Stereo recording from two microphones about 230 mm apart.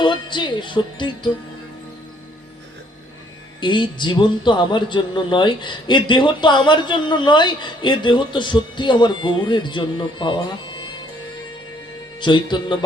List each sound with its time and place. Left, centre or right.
0.0 s speech: centre
3.6 s speech: centre
12.2 s speech: centre